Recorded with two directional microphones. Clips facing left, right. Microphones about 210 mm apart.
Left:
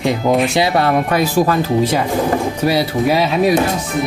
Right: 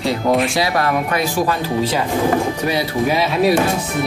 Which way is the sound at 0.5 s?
25° left (ahead or behind).